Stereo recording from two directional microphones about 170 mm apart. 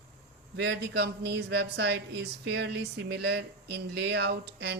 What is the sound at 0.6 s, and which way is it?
Speech, 80° right.